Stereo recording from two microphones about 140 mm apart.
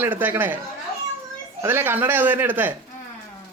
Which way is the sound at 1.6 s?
15° right (ahead or behind).